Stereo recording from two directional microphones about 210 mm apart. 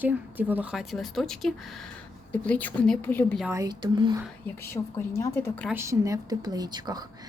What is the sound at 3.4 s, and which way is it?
Speech, 15° right (ahead or behind).